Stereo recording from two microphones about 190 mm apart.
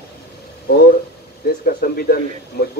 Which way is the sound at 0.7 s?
55° left (ahead or behind).